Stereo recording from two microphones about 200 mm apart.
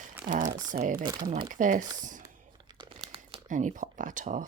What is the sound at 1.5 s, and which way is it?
Speech, 40° right (ahead or behind).